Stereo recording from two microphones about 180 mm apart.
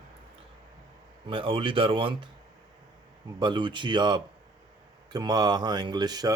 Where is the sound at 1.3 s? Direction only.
30° right (ahead or behind).